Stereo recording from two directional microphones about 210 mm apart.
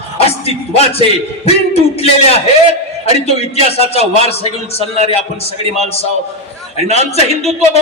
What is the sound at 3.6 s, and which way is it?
A man's voice, 30° left (ahead or behind).